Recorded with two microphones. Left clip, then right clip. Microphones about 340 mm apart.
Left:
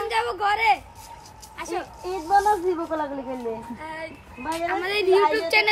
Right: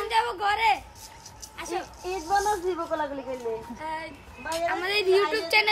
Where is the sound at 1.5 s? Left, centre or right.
Centre.